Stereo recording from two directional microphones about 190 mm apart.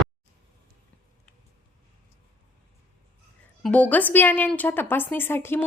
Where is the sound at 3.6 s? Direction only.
5° left (ahead or behind).